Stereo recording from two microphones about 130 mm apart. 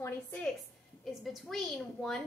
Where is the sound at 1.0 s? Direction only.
Centre (ahead or behind).